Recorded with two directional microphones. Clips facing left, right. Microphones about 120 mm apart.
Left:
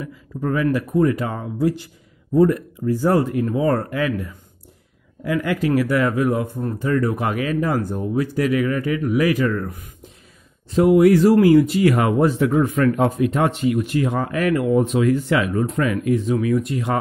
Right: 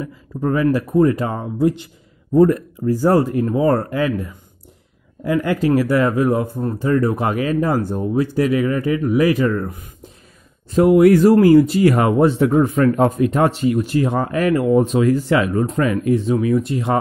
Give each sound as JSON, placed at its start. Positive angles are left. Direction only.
{"t": 0.0, "sound": "speech", "side_deg": -30}
{"t": 2.3, "sound": "speech", "side_deg": -45}
{"t": 10.7, "sound": "speech", "side_deg": -50}